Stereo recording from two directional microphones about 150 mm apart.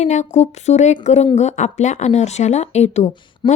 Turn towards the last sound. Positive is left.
turn(degrees=30)  # may be behind; listen again after turning